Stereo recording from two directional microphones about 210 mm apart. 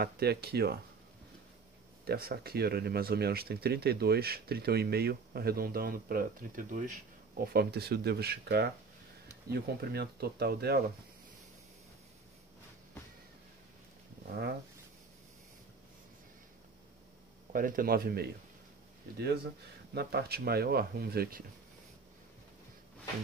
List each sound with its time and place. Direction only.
0.0 s speech: 50° right (ahead or behind)
2.0 s speech: 45° right (ahead or behind)
17.5 s speech: 40° right (ahead or behind)
19.9 s speech: 50° right (ahead or behind)